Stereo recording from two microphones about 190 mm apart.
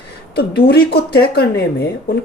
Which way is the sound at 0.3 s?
55° left (ahead or behind).